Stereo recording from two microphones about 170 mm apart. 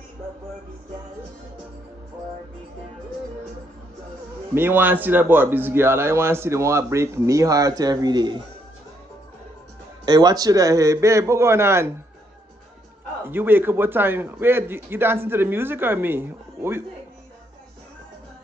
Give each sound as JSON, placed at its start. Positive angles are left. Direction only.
{"t": 4.6, "sound": "a man's voice", "side_deg": -10}
{"t": 10.0, "sound": "a man's voice", "side_deg": -25}
{"t": 13.2, "sound": "a man's voice", "side_deg": -10}